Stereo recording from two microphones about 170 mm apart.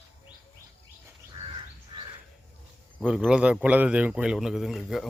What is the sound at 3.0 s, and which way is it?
A man's voice, 5° right (ahead or behind).